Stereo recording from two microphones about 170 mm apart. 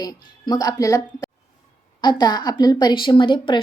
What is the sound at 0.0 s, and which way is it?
A woman's voice, 25° left (ahead or behind).